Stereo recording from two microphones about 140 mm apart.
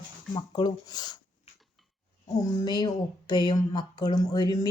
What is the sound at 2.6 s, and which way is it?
Speech, 30° left (ahead or behind).